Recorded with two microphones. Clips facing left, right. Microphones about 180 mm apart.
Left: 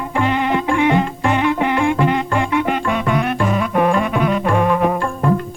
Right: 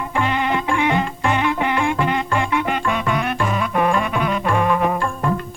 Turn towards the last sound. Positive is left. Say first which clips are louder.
# left 3 dB
turn(degrees=40)  # may be behind; listen again after turning